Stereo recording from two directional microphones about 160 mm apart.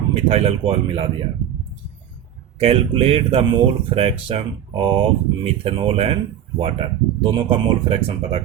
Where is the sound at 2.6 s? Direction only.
35° right (ahead or behind).